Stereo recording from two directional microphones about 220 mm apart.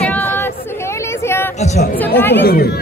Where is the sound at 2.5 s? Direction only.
45° left (ahead or behind).